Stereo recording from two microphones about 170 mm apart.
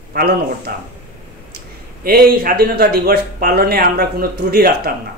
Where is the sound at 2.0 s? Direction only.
60° right (ahead or behind).